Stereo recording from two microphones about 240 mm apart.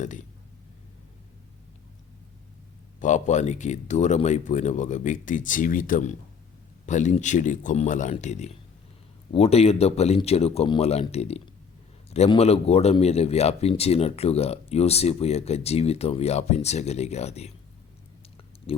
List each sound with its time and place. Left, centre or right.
0.0 s speech: left
3.0 s a man's voice: left
18.7 s a man's voice: left